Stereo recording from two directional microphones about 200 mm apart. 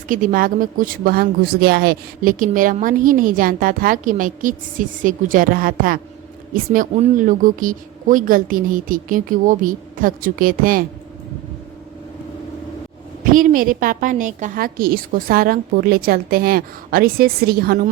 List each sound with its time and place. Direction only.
0.1 s a woman's voice: 40° right (ahead or behind)
13.3 s a woman's voice: 45° right (ahead or behind)